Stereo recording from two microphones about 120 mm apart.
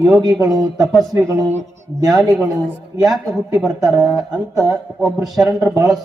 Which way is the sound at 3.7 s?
30° right (ahead or behind).